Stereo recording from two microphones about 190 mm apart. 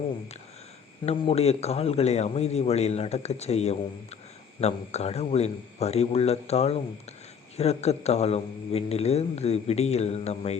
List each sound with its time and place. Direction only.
1.0 s speech: 30° left (ahead or behind)